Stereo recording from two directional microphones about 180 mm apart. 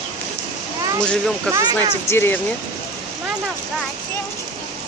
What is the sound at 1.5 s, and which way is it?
Speech, 20° right (ahead or behind).